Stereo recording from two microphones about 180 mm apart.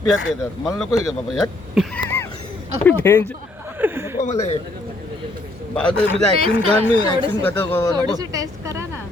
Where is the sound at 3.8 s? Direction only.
10° right (ahead or behind).